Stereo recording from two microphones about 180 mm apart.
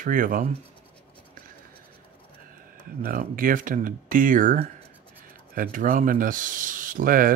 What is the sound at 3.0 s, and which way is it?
Speech, 50° right (ahead or behind).